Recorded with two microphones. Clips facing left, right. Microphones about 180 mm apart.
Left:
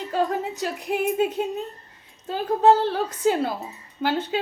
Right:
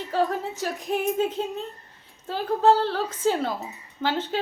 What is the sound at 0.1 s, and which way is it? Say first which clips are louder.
A woman's voice: even; 15° left (ahead or behind).